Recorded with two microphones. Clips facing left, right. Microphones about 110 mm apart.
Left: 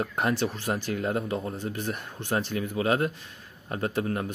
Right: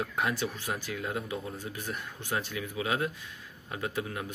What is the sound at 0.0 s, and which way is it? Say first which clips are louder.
Speech: left 4 dB; 50° left (ahead or behind).